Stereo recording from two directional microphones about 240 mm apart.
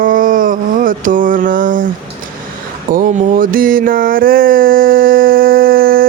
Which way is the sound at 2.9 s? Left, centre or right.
Right.